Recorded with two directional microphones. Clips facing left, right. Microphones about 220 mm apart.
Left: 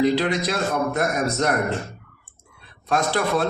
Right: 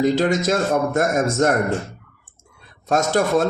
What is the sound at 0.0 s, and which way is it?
Speech, 45° right (ahead or behind).